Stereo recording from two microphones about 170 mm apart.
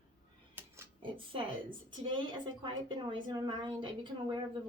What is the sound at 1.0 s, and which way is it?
Speech, 30° right (ahead or behind).